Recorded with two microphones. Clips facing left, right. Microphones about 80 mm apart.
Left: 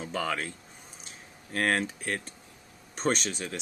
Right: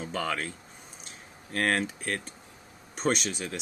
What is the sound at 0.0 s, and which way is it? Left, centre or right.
Speech, centre.